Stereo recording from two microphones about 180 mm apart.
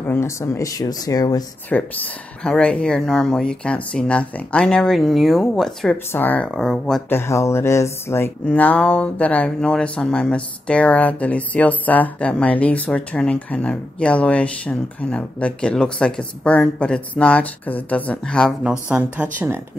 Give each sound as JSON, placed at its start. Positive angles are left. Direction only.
{"t": 0.0, "sound": "speech", "side_deg": 15}
{"t": 1.7, "sound": "speech", "side_deg": 5}
{"t": 7.1, "sound": "speech", "side_deg": 15}
{"t": 18.6, "sound": "a woman's voice", "side_deg": -5}